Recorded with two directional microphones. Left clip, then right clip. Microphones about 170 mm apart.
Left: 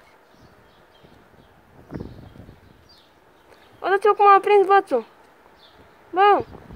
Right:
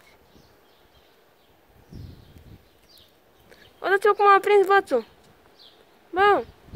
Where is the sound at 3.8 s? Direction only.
25° right (ahead or behind).